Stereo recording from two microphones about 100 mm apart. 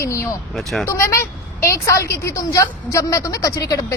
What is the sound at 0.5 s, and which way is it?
Speech, centre (ahead or behind).